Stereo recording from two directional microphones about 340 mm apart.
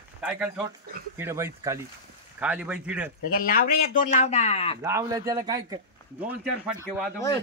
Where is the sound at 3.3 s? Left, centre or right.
Left.